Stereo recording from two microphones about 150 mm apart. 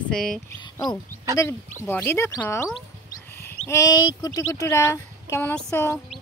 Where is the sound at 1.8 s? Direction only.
15° left (ahead or behind).